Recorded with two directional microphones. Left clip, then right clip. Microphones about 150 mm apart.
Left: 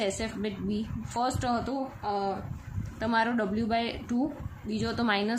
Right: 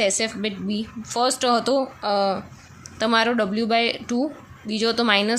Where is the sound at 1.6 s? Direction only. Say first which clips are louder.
Right 11 dB; 55° right (ahead or behind).